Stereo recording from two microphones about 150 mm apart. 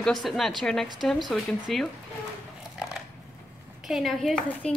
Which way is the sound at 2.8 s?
5° right (ahead or behind).